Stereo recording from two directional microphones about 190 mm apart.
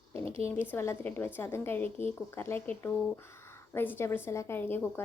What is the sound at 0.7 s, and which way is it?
Speech, 15° left (ahead or behind).